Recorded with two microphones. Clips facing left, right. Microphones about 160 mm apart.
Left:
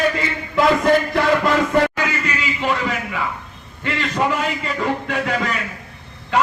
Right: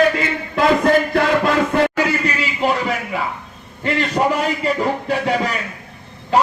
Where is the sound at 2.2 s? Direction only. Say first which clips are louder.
Right 3 dB; 35° right (ahead or behind).